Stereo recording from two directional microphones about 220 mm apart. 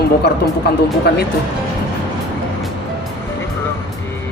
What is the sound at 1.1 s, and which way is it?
Speech, 50° left (ahead or behind).